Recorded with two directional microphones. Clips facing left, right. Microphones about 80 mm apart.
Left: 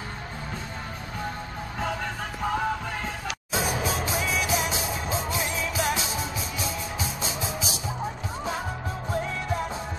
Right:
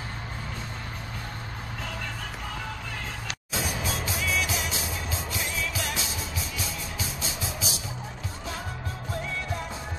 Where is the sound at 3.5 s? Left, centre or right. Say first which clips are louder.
Left 4 dB; centre.